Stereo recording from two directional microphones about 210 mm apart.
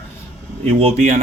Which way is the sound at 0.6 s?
30° right (ahead or behind).